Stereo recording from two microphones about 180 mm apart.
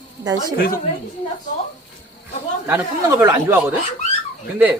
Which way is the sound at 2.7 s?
15° right (ahead or behind).